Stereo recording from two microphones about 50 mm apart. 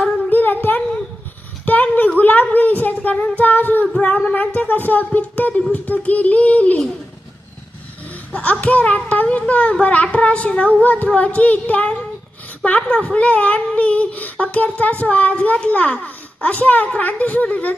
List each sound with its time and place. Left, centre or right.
0.0 s a sound: left
2.1 s speech: left
8.3 s a woman's voice: left